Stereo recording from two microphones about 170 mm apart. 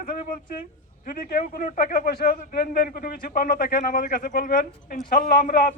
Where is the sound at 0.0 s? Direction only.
55° left (ahead or behind).